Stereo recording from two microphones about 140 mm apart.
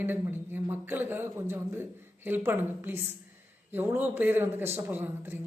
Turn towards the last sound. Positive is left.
turn(degrees=-15)  # may be behind; listen again after turning